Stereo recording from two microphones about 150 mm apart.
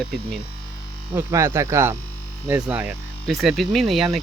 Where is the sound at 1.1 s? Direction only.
20° right (ahead or behind).